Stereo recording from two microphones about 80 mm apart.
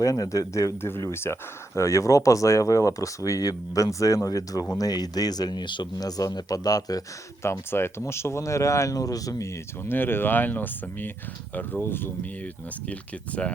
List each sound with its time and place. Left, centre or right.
0.0 s speech: left
0.8 s speech: left
6.0 s speech: left
7.4 s speech: left
9.8 s speech: left
12.9 s speech: centre